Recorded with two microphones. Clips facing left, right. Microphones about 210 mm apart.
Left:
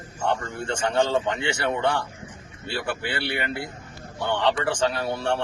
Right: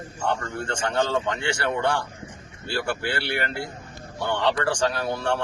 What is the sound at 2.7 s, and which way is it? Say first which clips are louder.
Speech: right 2 dB; 20° left (ahead or behind).